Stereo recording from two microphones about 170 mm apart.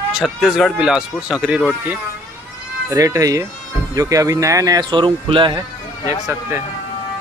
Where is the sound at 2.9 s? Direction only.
20° right (ahead or behind).